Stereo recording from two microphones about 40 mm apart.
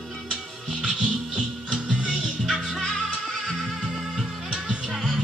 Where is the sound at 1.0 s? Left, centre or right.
Centre.